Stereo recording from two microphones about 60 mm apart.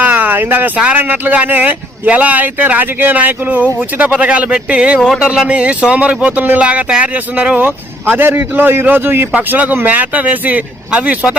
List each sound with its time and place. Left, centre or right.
0.0 s a sound: right
0.9 s speech: right
4.9 s speech: centre
5.2 s speech: centre; by 9.2 s right
9.3 s speech: right